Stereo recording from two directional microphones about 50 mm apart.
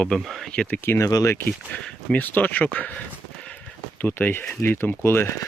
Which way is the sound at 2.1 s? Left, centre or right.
Left.